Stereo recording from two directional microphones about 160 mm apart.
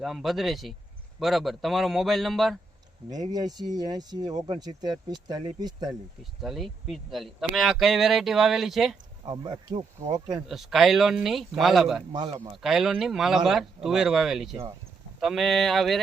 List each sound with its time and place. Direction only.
0.0 s speech: centre (ahead or behind)
3.3 s speech: 25° right (ahead or behind)
6.4 s speech: centre (ahead or behind)
9.2 s speech: 30° right (ahead or behind)
10.4 s speech: centre (ahead or behind)
12.1 s speech: 30° right (ahead or behind)
12.6 s speech: centre (ahead or behind)